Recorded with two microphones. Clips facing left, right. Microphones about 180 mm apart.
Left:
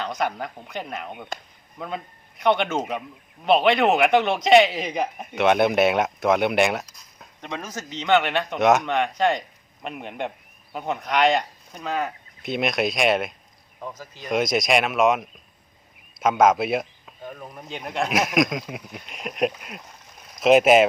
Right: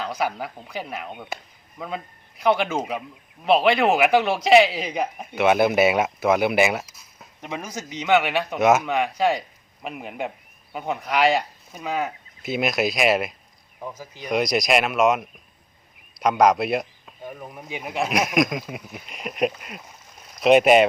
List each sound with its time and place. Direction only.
0.0 s speech: 5° right (ahead or behind)
14.3 s speech: centre (ahead or behind)
17.2 s speech: 10° right (ahead or behind)